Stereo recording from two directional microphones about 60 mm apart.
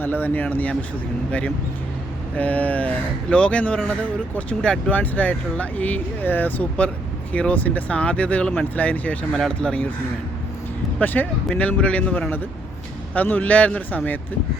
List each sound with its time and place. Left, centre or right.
0.0 s speech: left
11.0 s speech: left
11.4 s speech: centre